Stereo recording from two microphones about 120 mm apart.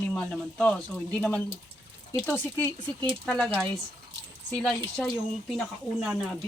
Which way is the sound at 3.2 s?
Centre (ahead or behind).